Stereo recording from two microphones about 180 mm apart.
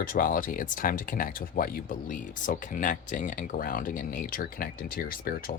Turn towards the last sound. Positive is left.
turn(degrees=55)  # may be behind; listen again after turning